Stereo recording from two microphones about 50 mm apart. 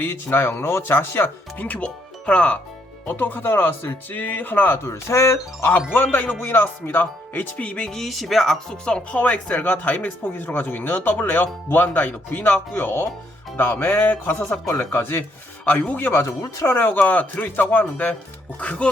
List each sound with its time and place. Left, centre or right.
0.0 s speech: left
1.6 s speech: left
3.1 s speech: left
4.2 s speech: left
4.9 s speech: left
5.9 s speech: left
7.9 s speech: centre
9.1 s speech: left
14.9 s speech: left
15.6 s speech: left